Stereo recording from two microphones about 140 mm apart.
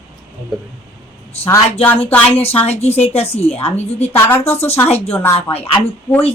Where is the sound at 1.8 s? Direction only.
15° left (ahead or behind).